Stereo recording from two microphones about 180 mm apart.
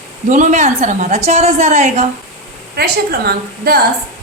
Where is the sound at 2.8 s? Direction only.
60° right (ahead or behind).